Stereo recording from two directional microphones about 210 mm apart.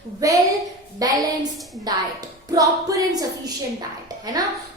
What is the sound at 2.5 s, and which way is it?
Music, 15° right (ahead or behind).